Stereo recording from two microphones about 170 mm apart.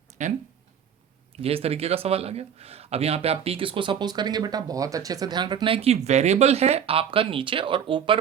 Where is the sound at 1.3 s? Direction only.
35° right (ahead or behind).